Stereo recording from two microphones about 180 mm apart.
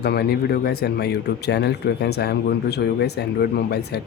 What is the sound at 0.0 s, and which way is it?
Speech, 65° left (ahead or behind).